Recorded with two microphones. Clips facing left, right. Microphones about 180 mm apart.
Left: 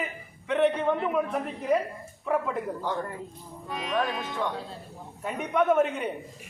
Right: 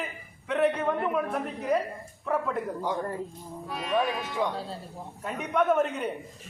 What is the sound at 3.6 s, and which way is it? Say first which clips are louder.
Speech: right 1 dB; centre (ahead or behind).